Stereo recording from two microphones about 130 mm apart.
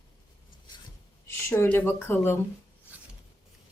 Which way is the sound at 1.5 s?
15° left (ahead or behind).